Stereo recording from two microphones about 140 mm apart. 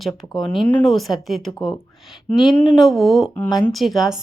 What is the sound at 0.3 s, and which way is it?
A woman's voice, centre (ahead or behind).